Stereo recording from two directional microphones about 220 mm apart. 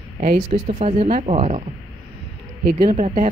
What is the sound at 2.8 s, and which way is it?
Speech, 25° right (ahead or behind).